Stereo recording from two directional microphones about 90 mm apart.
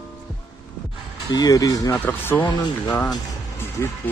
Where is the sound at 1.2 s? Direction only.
50° left (ahead or behind).